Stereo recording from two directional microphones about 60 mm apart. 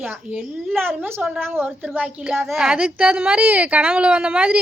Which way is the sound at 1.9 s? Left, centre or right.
Centre.